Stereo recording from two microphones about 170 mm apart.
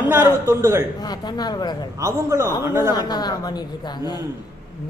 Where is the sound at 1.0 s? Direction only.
25° left (ahead or behind).